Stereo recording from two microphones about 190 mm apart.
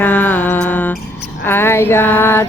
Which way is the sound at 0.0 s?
10° left (ahead or behind).